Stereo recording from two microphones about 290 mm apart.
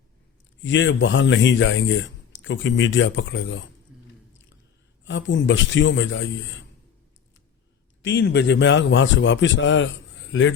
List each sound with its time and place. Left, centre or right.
0.6 s speech: left
5.0 s speech: left
8.0 s speech: left